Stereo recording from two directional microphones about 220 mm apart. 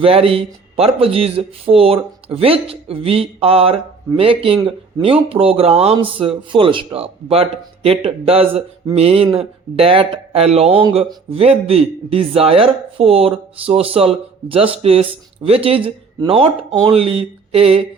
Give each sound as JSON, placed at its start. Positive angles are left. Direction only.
{"t": 0.0, "sound": "speech", "side_deg": -25}